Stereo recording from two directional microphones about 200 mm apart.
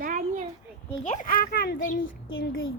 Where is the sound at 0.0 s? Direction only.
40° right (ahead or behind).